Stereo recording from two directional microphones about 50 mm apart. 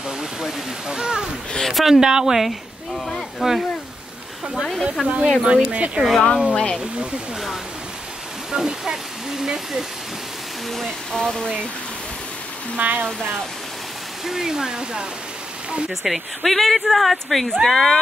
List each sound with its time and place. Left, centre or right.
0.2 s speech: centre
1.7 s speech: centre
2.0 s speech: centre
3.3 s speech: centre
5.0 s speech: right
6.1 s speech: centre
8.5 s speech: centre
10.7 s speech: centre
12.7 s speech: right
14.2 s speech: centre
15.9 s speech: centre